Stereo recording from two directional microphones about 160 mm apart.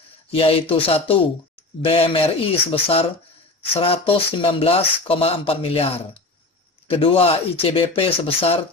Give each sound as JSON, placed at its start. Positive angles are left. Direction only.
{"t": 0.3, "sound": "speech", "side_deg": 35}